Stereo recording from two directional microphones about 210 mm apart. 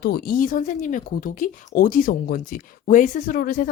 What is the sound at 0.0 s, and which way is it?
Speech, 45° left (ahead or behind).